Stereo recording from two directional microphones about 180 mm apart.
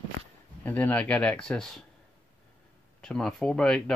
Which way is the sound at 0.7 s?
10° left (ahead or behind).